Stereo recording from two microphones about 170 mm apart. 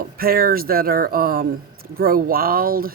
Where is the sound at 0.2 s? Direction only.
60° right (ahead or behind).